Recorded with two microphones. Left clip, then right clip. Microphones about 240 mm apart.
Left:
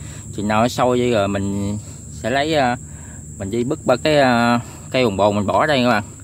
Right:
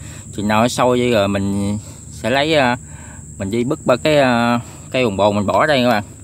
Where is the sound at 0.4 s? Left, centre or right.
Centre.